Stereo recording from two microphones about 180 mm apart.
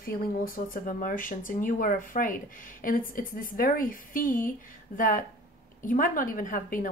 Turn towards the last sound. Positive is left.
turn(degrees=50)  # may be behind; listen again after turning